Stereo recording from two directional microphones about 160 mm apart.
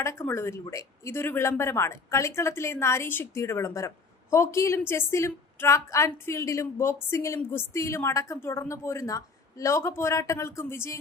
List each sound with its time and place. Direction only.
0.0 s speech: 15° left (ahead or behind)